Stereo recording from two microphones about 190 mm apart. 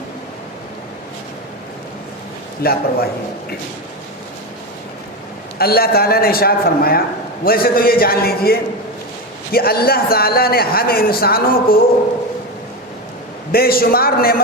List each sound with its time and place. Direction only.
2.6 s a man's voice: 55° left (ahead or behind)
5.5 s a man's voice: 55° left (ahead or behind)
13.5 s a man's voice: 50° left (ahead or behind)